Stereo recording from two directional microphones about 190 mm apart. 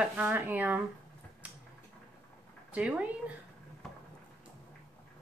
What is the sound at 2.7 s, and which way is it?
Speech, 5° right (ahead or behind).